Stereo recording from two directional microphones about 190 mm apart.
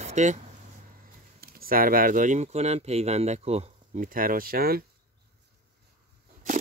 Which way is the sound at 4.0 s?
50° right (ahead or behind).